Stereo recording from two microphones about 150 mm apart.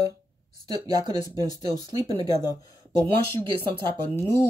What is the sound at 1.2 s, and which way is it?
Speech, 25° left (ahead or behind).